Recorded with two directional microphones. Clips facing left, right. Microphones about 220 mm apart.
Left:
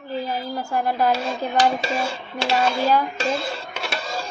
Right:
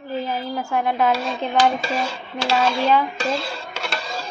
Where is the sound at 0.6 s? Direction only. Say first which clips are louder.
Right 1 dB; centre (ahead or behind).